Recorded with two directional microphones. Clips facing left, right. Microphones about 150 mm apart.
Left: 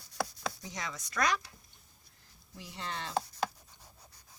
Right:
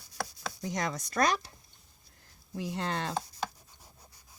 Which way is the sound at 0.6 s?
45° right (ahead or behind).